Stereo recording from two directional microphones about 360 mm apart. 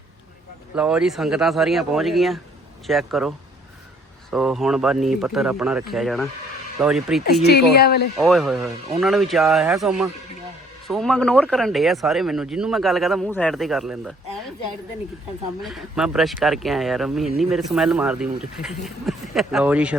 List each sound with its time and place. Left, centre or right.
0.8 s speech: centre
7.7 s speech: left
8.1 s speech: centre
15.6 s speech: centre